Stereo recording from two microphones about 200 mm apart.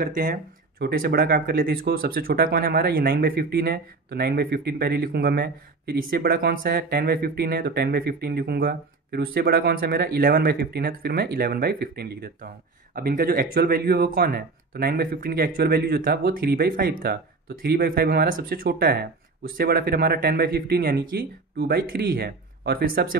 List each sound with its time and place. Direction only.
0.0 s speech: 45° right (ahead or behind)